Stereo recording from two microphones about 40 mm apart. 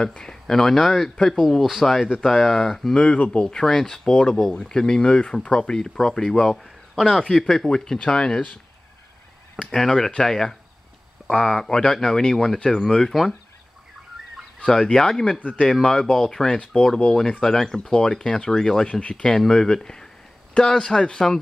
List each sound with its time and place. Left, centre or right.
0.0 s speech: centre
1.6 s speech: centre
3.0 s speech: left
3.4 s speech: centre
4.3 s speech: centre
4.6 s speech: centre
9.6 s speech: centre
13.1 s speech: centre
14.6 s speech: centre
18.9 s speech: left
19.2 s speech: centre